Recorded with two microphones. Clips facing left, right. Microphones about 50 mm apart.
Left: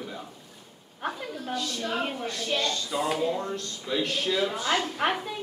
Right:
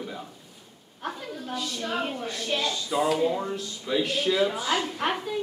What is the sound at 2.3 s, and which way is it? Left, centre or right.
A woman's voice, centre.